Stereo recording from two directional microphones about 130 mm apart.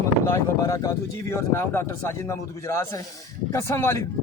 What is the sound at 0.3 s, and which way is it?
Speech, 20° left (ahead or behind).